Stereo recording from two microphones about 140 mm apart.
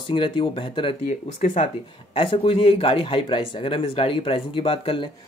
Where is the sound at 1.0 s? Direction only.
60° left (ahead or behind).